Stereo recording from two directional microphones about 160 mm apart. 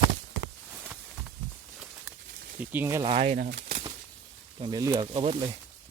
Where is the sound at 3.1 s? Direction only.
40° right (ahead or behind).